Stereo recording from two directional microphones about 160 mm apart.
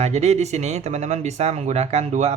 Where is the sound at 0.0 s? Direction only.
45° right (ahead or behind).